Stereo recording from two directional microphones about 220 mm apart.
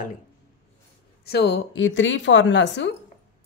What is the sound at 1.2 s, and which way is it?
Speech, 50° left (ahead or behind).